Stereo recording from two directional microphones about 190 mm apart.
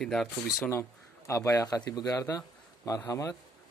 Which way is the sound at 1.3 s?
15° left (ahead or behind).